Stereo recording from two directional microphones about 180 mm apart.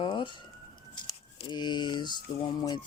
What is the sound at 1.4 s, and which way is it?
Speech, 25° left (ahead or behind).